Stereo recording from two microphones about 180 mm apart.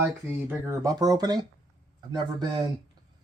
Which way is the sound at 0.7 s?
20° right (ahead or behind).